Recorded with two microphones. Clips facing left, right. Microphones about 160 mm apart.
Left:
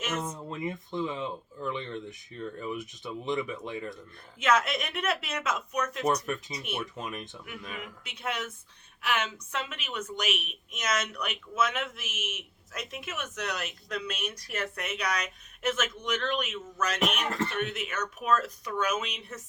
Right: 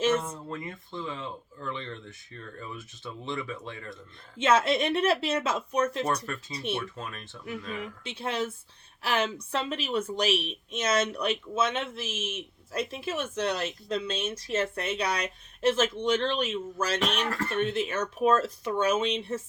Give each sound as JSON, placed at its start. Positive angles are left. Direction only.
{"t": 0.2, "sound": "speech", "side_deg": 15}
{"t": 4.4, "sound": "speech", "side_deg": -30}
{"t": 6.1, "sound": "speech", "side_deg": 15}
{"t": 6.5, "sound": "speech", "side_deg": -30}
{"t": 6.9, "sound": "speech", "side_deg": 15}
{"t": 7.8, "sound": "a woman's voice", "side_deg": -30}
{"t": 17.2, "sound": "speech", "side_deg": 20}
{"t": 17.5, "sound": "speech", "side_deg": -30}